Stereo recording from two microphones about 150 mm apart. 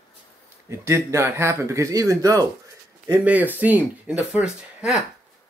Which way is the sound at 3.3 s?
10° right (ahead or behind).